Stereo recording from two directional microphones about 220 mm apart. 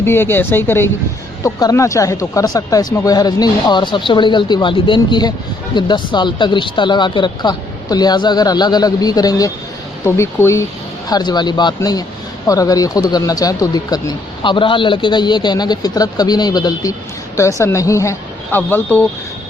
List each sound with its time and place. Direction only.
0.0 s speech: 10° left (ahead or behind)